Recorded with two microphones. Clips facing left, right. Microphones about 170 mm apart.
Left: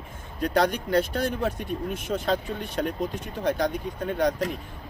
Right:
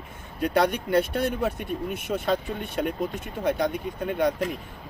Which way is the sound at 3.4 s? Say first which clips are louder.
Even; 5° right (ahead or behind).